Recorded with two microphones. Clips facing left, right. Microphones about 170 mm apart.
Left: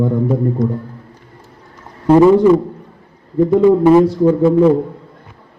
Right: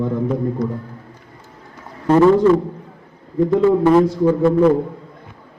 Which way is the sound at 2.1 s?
10° left (ahead or behind).